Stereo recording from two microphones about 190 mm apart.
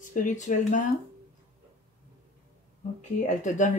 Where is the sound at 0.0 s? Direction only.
45° left (ahead or behind).